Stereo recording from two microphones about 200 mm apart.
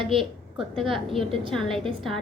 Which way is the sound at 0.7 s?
Centre (ahead or behind).